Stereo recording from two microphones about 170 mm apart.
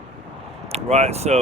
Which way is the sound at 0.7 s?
40° right (ahead or behind).